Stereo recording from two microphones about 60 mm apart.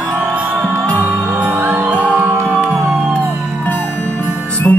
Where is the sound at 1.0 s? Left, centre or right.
Right.